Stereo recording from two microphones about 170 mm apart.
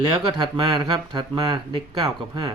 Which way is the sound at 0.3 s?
30° right (ahead or behind).